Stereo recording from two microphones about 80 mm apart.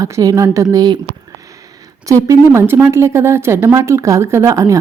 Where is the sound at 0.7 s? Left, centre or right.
Right.